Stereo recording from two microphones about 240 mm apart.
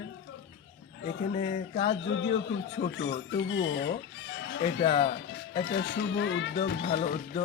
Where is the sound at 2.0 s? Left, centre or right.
Left.